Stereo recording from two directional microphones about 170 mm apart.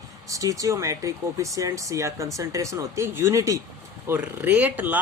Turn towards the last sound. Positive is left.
turn(degrees=-10)  # may be behind; listen again after turning